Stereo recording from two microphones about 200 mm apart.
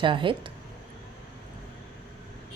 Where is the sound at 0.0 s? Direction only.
25° right (ahead or behind).